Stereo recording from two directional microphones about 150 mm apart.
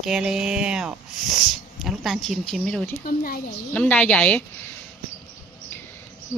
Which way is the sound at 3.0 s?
70° left (ahead or behind).